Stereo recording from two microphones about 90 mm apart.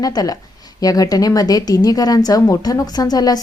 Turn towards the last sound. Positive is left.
turn(degrees=45)  # may be behind; listen again after turning